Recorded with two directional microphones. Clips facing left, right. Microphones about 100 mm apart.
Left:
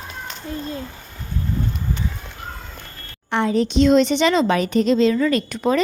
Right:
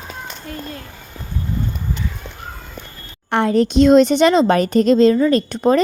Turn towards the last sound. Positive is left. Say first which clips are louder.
# right 4 dB
turn(degrees=-35)  # may be behind; listen again after turning